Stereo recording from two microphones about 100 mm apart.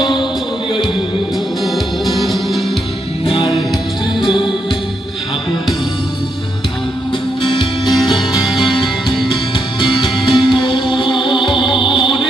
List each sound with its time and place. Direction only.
0.0 s music: 50° left (ahead or behind)
1.6 s music: centre (ahead or behind)
7.4 s music: 50° left (ahead or behind)
8.1 s music: 5° right (ahead or behind)
10.0 s music: 55° left (ahead or behind)